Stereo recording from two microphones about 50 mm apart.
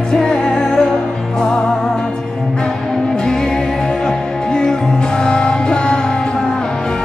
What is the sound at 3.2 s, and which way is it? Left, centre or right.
Music, centre.